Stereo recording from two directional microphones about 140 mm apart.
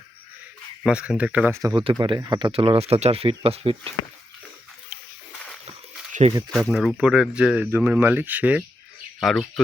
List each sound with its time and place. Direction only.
0.9 s speech: 10° right (ahead or behind)
1.7 s speech: 35° right (ahead or behind)
2.5 s speech: 40° right (ahead or behind)
6.5 s speech: centre (ahead or behind)
7.7 s speech: 15° right (ahead or behind)
9.2 s speech: centre (ahead or behind)